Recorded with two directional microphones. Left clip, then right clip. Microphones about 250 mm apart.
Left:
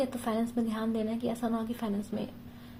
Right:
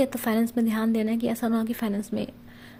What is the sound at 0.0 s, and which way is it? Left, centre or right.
Speech, right.